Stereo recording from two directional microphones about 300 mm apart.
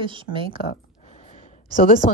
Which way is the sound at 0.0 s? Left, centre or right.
Centre.